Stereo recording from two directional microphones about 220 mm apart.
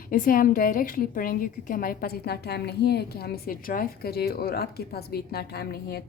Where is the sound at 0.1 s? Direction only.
40° left (ahead or behind).